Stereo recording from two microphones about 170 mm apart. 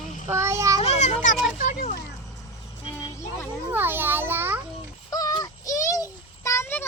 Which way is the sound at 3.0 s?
15° left (ahead or behind).